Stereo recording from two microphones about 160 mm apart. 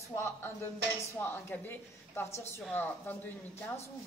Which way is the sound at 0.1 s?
15° left (ahead or behind).